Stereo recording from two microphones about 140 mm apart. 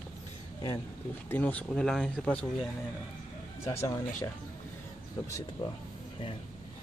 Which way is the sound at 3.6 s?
20° left (ahead or behind).